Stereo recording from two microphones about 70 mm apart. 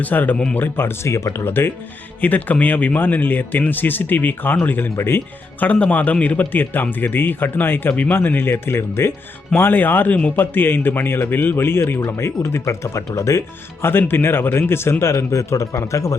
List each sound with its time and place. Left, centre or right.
0.0 s speech: left
2.2 s speech: left
5.6 s speech: left
11.9 s speech: left
14.1 s speech: left